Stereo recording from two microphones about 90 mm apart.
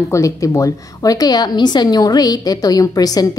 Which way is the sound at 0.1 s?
35° left (ahead or behind).